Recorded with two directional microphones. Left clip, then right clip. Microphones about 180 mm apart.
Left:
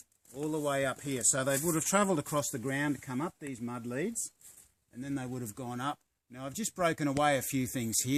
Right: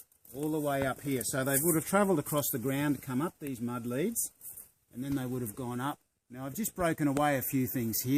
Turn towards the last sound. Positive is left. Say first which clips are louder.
# right 1 dB
turn(degrees=40)  # may be behind; listen again after turning